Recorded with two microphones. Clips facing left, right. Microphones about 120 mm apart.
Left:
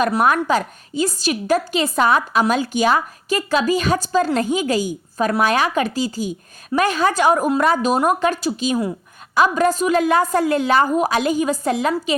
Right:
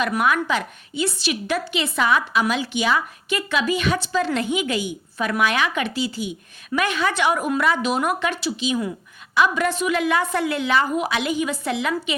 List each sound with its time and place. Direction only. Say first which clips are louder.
0.0 s a woman's voice: left 4 dB; 40° left (ahead or behind)